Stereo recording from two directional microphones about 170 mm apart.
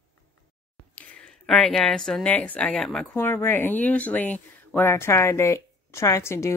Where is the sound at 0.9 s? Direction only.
5° left (ahead or behind).